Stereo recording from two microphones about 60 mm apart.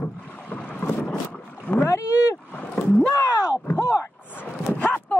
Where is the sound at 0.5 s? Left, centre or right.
Centre.